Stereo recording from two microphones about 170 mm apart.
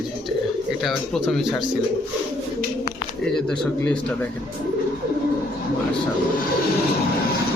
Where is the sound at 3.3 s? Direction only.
5° left (ahead or behind).